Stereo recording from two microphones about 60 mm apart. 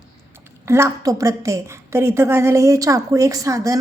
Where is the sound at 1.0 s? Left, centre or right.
Right.